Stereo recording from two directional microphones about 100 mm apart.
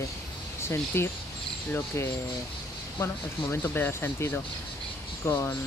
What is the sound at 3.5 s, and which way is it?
Speech, 20° left (ahead or behind).